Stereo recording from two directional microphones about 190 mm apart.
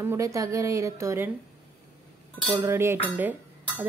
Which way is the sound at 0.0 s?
15° right (ahead or behind).